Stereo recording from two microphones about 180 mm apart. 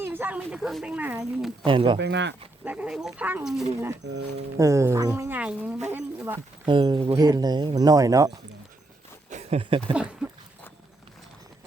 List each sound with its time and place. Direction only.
0.0 s speech: 10° right (ahead or behind)
1.6 s speech: 30° right (ahead or behind)
2.0 s speech: 75° right (ahead or behind)
2.6 s speech: 5° right (ahead or behind)
4.5 s speech: 15° right (ahead or behind)
6.7 s speech: 25° right (ahead or behind)
9.3 s a sound: 35° right (ahead or behind)
9.9 s speech: 5° right (ahead or behind)